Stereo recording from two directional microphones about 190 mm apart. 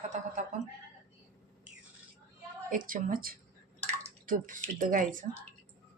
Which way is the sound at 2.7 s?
45° right (ahead or behind).